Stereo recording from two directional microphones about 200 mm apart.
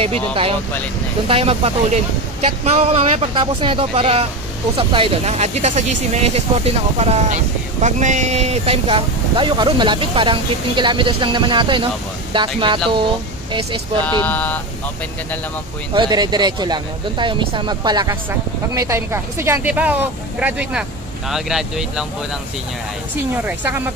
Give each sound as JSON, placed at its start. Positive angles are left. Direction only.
{"t": 0.0, "sound": "speech", "side_deg": -30}
{"t": 14.1, "sound": "speech", "side_deg": 10}
{"t": 15.9, "sound": "speech", "side_deg": -20}
{"t": 23.3, "sound": "speech", "side_deg": -10}